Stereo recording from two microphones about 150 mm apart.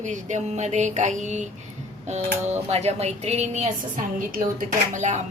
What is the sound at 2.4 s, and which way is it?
Speech, 45° right (ahead or behind).